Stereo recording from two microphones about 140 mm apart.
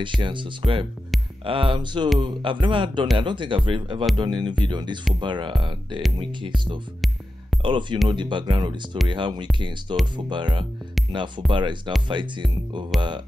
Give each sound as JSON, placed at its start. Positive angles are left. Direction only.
{"t": 0.0, "sound": "speech", "side_deg": -35}